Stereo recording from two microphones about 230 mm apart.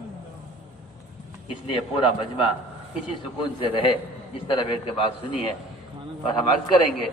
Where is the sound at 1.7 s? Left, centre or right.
Left.